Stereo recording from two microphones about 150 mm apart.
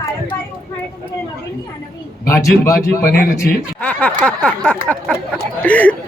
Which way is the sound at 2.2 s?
20° left (ahead or behind).